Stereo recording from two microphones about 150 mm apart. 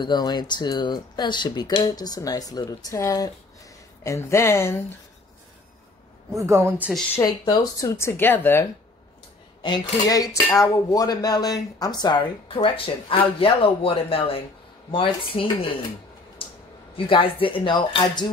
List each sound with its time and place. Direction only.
0.0 s speech: 30° left (ahead or behind)
6.3 s a woman's voice: 20° right (ahead or behind)
7.4 s speech: 25° left (ahead or behind)
9.6 s speech: 25° left (ahead or behind)
16.4 s a sound: 35° left (ahead or behind)
16.9 s speech: 35° left (ahead or behind)